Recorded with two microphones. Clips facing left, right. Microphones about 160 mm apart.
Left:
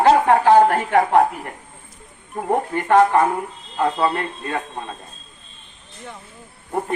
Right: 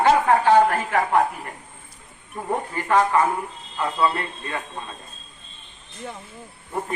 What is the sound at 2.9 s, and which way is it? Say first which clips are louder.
Speech: left 5 dB; 60° left (ahead or behind).